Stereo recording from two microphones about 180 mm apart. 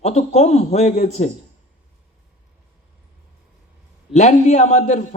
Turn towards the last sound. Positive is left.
turn(degrees=40)  # may be behind; listen again after turning